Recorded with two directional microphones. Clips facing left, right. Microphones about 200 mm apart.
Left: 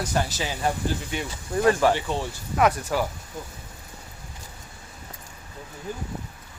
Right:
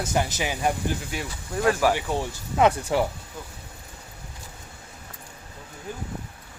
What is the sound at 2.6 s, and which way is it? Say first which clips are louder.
Speech: right 2 dB; 25° right (ahead or behind).